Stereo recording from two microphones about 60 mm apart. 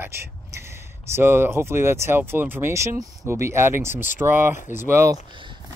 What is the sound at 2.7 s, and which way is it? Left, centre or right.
Speech, right.